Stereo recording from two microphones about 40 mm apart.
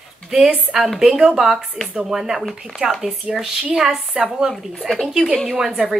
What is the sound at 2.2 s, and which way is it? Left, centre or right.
Speech, centre.